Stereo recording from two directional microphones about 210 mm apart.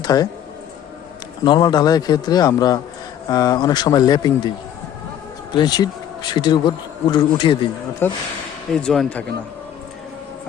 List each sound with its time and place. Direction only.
0.0 s speech: 20° left (ahead or behind)
1.5 s a man's voice: 20° left (ahead or behind)
8.0 s a man's voice: 10° left (ahead or behind)